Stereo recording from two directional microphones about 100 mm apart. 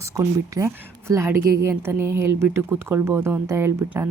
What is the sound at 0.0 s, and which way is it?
A woman's voice, 30° right (ahead or behind).